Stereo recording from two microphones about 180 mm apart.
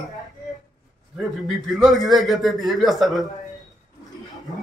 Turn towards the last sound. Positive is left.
turn(degrees=0)  # may be behind; listen again after turning